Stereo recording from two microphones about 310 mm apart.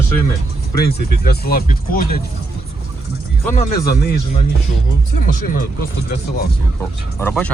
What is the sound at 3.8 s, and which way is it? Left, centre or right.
Speech, left.